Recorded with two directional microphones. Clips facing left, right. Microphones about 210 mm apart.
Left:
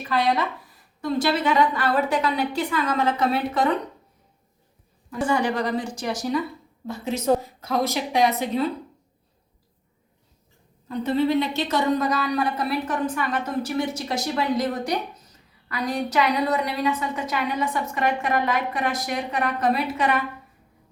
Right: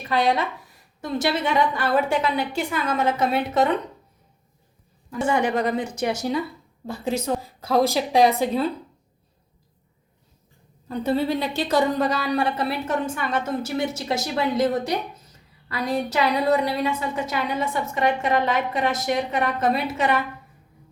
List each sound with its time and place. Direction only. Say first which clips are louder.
0.1 s a woman's voice: right 1 dB; 25° right (ahead or behind)
5.2 s a woman's voice: right 1 dB; 20° right (ahead or behind)
10.8 s a woman's voice: left 1 dB; 35° right (ahead or behind)